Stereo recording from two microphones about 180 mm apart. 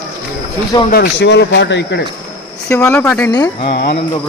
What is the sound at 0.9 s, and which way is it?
Speech, 55° left (ahead or behind).